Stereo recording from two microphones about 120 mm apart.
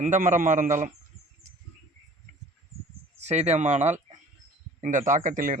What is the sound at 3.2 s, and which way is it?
Speech, 65° right (ahead or behind).